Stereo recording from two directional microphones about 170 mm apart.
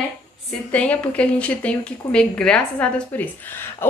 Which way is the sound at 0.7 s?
10° left (ahead or behind).